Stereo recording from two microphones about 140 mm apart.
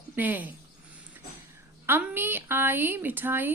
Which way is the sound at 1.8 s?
15° right (ahead or behind).